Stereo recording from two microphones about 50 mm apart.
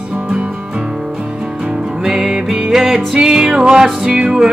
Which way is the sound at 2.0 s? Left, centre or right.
Centre.